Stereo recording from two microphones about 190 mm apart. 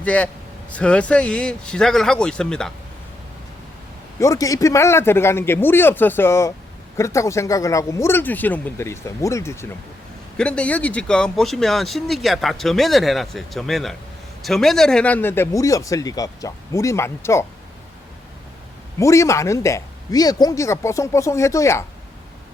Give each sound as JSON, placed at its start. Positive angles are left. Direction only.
{"t": 0.0, "sound": "a man's voice", "side_deg": 5}
{"t": 4.2, "sound": "speech", "side_deg": 15}
{"t": 18.9, "sound": "speech", "side_deg": 15}